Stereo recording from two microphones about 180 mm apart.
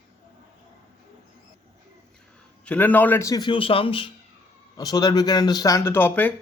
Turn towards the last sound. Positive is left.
turn(degrees=10)  # may be behind; listen again after turning